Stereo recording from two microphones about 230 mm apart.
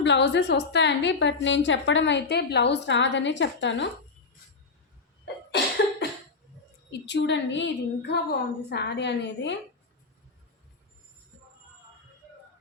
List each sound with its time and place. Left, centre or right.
0.0 s a woman's voice: left
5.5 s cough: left
7.0 s a woman's voice: left